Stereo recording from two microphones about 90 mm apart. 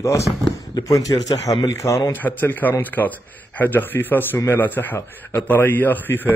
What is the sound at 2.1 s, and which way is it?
A man's voice, 20° left (ahead or behind).